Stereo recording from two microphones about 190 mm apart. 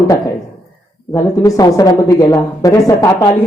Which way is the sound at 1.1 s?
15° left (ahead or behind).